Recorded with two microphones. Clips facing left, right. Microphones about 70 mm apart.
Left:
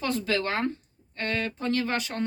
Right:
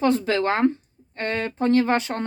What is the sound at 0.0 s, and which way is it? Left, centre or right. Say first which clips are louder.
Speech: right 7 dB; right.